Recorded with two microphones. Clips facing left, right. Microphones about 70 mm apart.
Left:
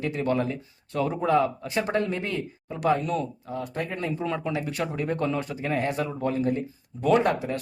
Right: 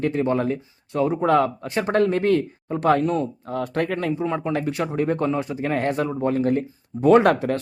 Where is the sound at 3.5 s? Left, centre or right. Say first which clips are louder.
Right 9 dB; right.